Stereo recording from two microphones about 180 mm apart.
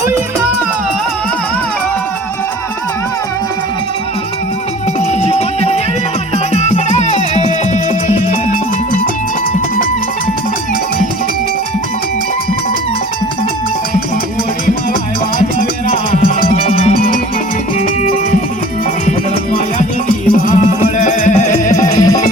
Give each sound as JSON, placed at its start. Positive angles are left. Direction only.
{"t": 4.9, "sound": "music", "side_deg": 35}
{"t": 16.1, "sound": "music", "side_deg": 35}
{"t": 20.3, "sound": "music", "side_deg": 45}